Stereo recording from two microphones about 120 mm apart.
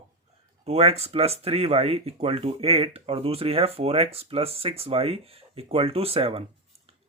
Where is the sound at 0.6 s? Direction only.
55° right (ahead or behind).